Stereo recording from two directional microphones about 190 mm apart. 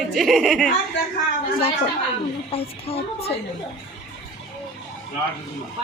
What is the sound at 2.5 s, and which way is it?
Speech, 30° left (ahead or behind).